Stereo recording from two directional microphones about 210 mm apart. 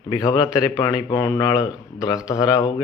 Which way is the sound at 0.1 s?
15° left (ahead or behind).